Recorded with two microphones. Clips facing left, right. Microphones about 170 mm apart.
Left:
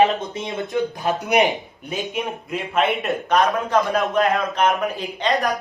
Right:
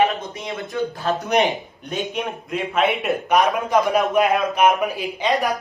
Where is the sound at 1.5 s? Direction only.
Centre (ahead or behind); by 4.6 s 15° right (ahead or behind).